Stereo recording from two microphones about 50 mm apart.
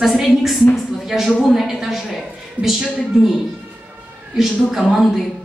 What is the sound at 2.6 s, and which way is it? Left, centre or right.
Speech, left.